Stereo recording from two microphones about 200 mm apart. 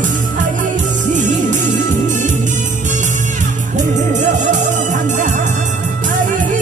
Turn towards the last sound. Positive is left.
turn(degrees=-40)  # may be behind; listen again after turning